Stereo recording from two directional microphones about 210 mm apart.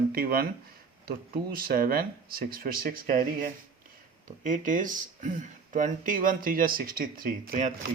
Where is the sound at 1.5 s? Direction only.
45° right (ahead or behind).